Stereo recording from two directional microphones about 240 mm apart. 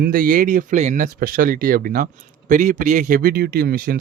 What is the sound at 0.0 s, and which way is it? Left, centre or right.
Speech, right.